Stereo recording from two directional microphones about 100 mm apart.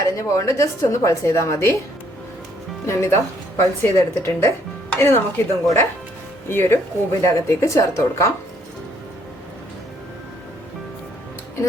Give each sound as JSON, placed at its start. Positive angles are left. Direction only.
{"t": 0.0, "sound": "a woman's voice", "side_deg": 30}
{"t": 2.8, "sound": "speech", "side_deg": 25}